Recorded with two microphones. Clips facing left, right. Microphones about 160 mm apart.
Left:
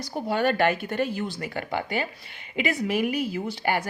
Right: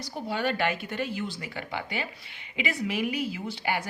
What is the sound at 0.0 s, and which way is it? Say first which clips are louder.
A woman's voice: left 5 dB; 45° left (ahead or behind).